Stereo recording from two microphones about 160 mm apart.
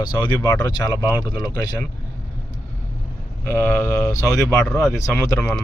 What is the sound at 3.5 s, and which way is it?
Speech, 15° left (ahead or behind).